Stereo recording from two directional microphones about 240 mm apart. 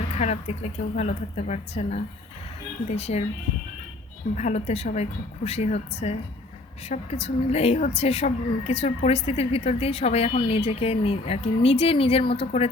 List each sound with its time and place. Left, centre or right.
0.1 s a woman's voice: left
4.4 s a woman's voice: left